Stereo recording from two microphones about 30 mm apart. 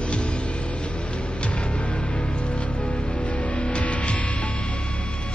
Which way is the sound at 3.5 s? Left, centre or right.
Left.